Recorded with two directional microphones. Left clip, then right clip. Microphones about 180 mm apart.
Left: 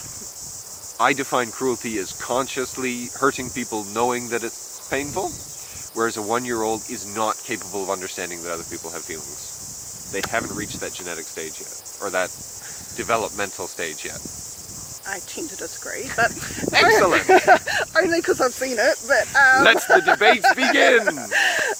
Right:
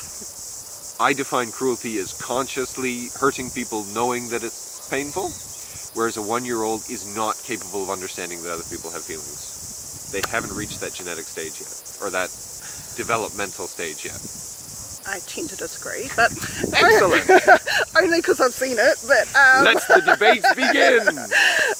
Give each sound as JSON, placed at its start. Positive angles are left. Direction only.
{"t": 0.9, "sound": "speech", "side_deg": 20}
{"t": 10.3, "sound": "speech", "side_deg": 15}
{"t": 15.0, "sound": "speech", "side_deg": -25}
{"t": 20.7, "sound": "speech", "side_deg": 25}
{"t": 21.0, "sound": "speech", "side_deg": -15}